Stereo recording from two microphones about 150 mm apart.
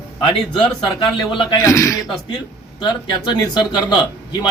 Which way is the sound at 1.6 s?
20° left (ahead or behind).